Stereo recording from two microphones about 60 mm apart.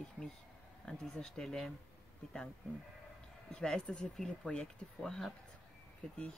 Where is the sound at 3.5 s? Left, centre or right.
Centre.